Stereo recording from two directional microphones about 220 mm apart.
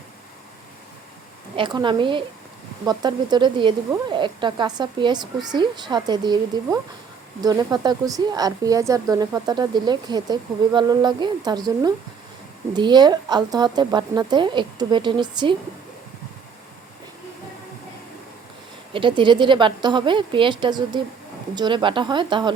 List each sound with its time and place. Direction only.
1.5 s speech: 20° right (ahead or behind)
18.9 s speech: 20° right (ahead or behind)